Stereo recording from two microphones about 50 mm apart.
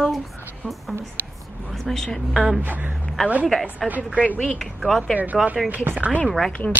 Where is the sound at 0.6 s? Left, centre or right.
Left.